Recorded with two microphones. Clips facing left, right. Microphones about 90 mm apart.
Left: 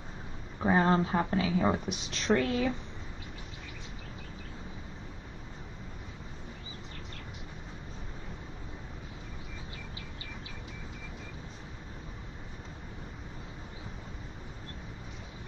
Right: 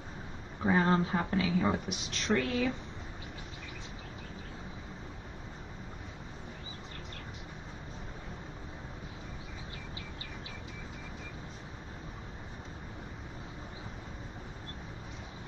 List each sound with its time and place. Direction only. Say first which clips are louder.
0.6 s speech: left 2 dB; 30° left (ahead or behind)